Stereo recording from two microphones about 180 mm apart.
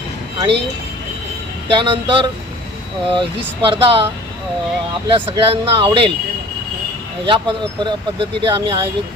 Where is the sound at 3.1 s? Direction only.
30° right (ahead or behind).